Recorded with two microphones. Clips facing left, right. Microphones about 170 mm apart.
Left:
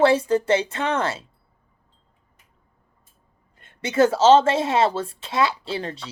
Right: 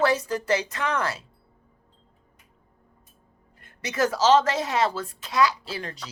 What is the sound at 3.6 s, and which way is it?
Speech, 25° left (ahead or behind).